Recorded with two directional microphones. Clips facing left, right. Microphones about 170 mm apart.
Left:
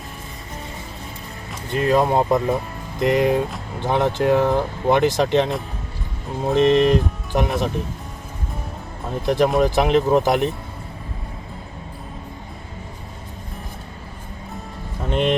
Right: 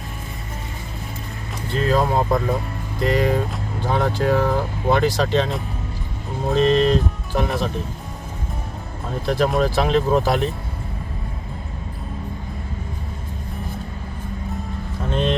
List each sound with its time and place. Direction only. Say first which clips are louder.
1.7 s speech: left 2 dB; 15° left (ahead or behind)
6.5 s speech: left 1 dB; 20° left (ahead or behind)
9.2 s speech: left 2 dB; 20° left (ahead or behind)
15.1 s a sound: left 2 dB; 15° left (ahead or behind)